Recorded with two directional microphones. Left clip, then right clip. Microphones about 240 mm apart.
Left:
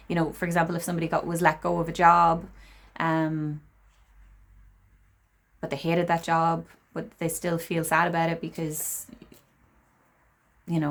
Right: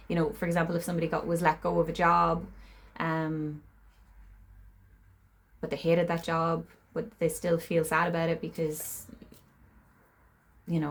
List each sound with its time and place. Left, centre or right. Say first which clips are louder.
0.1 s speech: left 2 dB; left
5.5 s speech: even; left
10.7 s speech: left 4 dB; left